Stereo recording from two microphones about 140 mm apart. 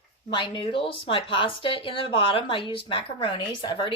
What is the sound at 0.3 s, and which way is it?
Speech, 35° left (ahead or behind).